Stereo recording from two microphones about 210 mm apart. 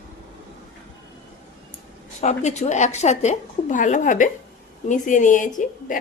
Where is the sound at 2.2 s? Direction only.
35° left (ahead or behind).